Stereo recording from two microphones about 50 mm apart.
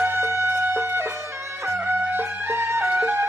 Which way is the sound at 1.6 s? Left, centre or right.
Right.